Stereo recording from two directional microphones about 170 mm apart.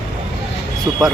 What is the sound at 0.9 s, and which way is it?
Speech, 15° right (ahead or behind).